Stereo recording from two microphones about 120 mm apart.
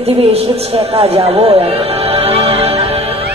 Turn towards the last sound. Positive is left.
turn(degrees=-55)  # may be behind; listen again after turning